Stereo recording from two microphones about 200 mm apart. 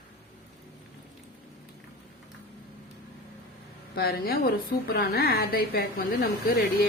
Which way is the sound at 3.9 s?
50° left (ahead or behind).